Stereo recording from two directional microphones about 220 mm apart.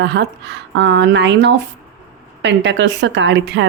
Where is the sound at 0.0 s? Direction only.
50° right (ahead or behind).